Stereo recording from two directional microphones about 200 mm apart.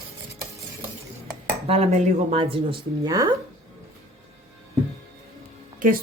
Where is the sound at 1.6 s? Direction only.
30° right (ahead or behind).